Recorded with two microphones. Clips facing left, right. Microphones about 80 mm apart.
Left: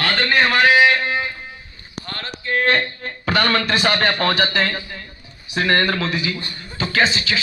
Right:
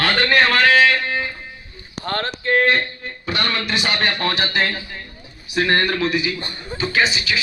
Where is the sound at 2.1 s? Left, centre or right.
Right.